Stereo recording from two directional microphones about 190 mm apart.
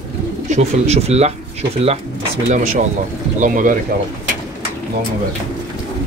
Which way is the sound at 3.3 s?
45° right (ahead or behind).